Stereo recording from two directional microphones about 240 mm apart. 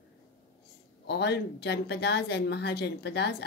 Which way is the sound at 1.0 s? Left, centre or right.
Left.